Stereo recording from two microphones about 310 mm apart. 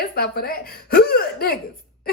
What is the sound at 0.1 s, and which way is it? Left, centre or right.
Speech, left.